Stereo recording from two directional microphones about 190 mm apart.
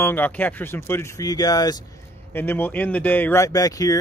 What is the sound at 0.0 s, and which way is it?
Speech, 10° left (ahead or behind).